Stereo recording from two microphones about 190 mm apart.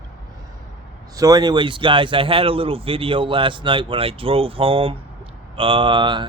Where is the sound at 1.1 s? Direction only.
20° right (ahead or behind).